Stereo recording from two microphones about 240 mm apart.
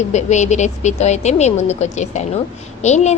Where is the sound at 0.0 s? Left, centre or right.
Left.